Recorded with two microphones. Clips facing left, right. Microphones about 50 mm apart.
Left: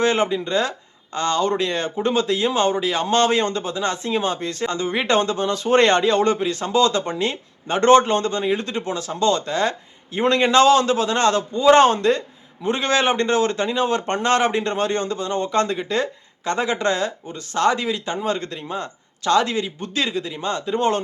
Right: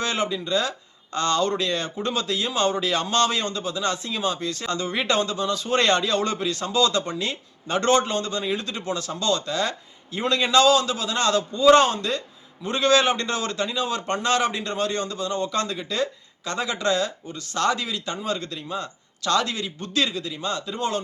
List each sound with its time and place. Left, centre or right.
0.0 s speech: left
1.1 s speech: centre; by 21.0 s left